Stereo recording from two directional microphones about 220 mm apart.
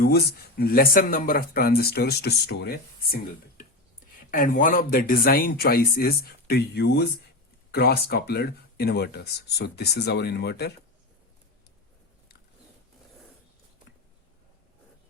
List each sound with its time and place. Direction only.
0.0 s speech: 45° left (ahead or behind)
4.3 s speech: 40° left (ahead or behind)